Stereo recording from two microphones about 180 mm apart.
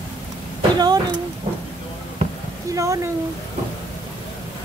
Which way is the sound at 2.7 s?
15° right (ahead or behind).